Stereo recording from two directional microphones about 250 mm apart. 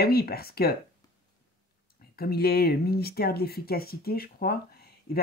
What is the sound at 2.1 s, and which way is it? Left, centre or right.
Speech, left.